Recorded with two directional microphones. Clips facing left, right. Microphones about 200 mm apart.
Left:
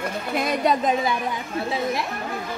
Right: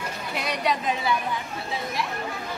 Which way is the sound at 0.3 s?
50° left (ahead or behind).